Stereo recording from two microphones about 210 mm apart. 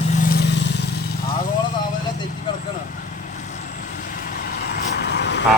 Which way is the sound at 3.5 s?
35° left (ahead or behind).